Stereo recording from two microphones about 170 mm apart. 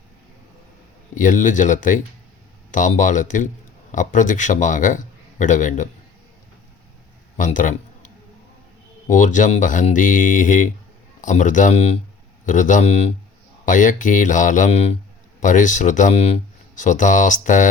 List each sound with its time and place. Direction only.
1.1 s speech: 50° left (ahead or behind)
7.3 s a sound: 50° left (ahead or behind)
9.0 s speech: 50° left (ahead or behind)